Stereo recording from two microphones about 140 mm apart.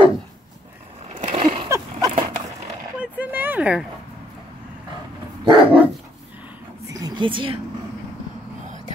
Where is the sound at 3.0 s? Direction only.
10° right (ahead or behind).